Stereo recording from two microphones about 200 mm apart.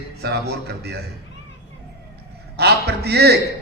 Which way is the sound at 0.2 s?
55° right (ahead or behind).